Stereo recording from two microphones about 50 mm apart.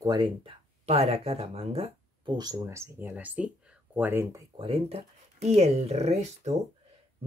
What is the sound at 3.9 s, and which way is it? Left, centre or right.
Speech, right.